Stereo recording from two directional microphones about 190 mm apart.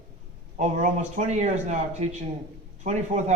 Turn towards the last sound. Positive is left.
turn(degrees=-40)  # may be behind; listen again after turning